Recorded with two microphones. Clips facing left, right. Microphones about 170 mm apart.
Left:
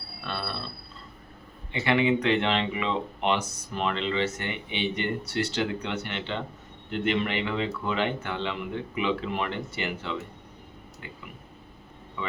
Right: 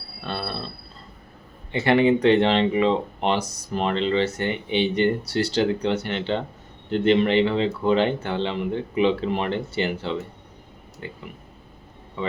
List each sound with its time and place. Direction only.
0.3 s a sound: 35° right (ahead or behind)
1.7 s speech: 40° right (ahead or behind)
12.2 s speech: 35° right (ahead or behind)